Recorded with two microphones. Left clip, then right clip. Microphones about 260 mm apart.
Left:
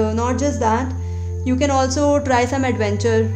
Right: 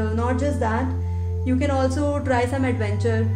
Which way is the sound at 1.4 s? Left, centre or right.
Left.